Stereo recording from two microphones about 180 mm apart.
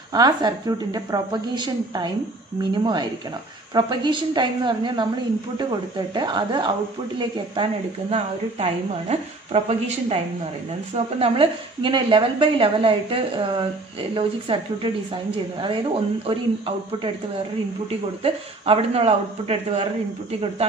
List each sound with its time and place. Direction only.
0.1 s a woman's voice: 20° right (ahead or behind)
8.1 s a man's voice: 35° right (ahead or behind)
18.2 s a man's voice: 35° right (ahead or behind)